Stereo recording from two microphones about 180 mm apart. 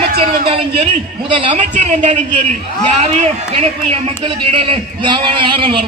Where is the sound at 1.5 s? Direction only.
40° right (ahead or behind).